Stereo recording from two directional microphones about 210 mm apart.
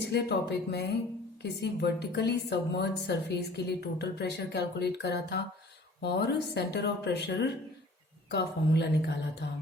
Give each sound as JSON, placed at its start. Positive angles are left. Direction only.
{"t": 0.0, "sound": "a woman's voice", "side_deg": 50}